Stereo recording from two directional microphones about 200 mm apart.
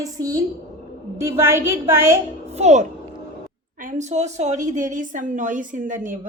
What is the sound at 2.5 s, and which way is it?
A woman's voice, 35° right (ahead or behind).